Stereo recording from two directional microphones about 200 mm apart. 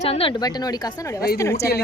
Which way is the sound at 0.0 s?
30° left (ahead or behind).